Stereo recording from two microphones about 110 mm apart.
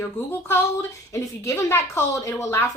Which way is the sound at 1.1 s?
25° left (ahead or behind).